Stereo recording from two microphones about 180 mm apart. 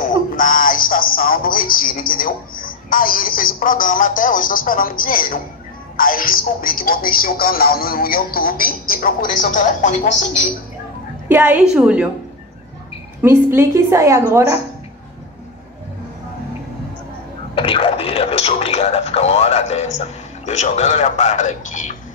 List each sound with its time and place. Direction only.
0.4 s music: 50° left (ahead or behind)
5.9 s speech: 50° left (ahead or behind)
11.2 s a woman's voice: 10° right (ahead or behind)
13.2 s a woman's voice: 15° right (ahead or behind)
17.6 s speech: 30° left (ahead or behind)